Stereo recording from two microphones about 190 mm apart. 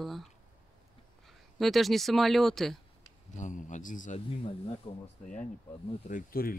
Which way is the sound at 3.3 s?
40° left (ahead or behind).